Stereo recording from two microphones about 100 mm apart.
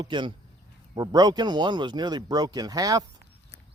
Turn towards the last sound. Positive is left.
turn(degrees=-40)  # may be behind; listen again after turning